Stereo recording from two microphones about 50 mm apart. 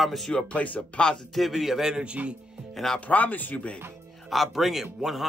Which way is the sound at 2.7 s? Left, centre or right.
Centre.